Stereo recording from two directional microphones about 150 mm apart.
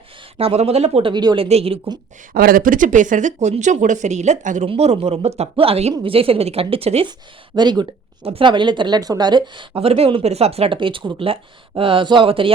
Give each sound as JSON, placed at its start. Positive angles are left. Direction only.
{"t": 0.3, "sound": "a woman's voice", "side_deg": -40}
{"t": 1.5, "sound": "a woman's voice", "side_deg": -40}
{"t": 2.3, "sound": "a woman's voice", "side_deg": -75}
{"t": 7.5, "sound": "speech", "side_deg": -30}
{"t": 8.2, "sound": "a woman's voice", "side_deg": -40}